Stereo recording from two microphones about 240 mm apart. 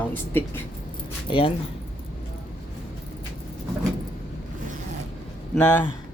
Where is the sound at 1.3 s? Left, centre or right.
Left.